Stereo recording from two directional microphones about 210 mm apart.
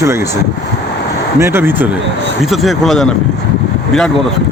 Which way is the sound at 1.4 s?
10° right (ahead or behind).